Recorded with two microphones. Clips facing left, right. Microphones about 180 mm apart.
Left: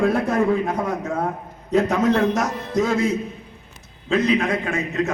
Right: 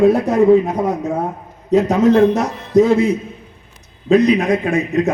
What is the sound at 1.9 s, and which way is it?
Speech, 35° right (ahead or behind).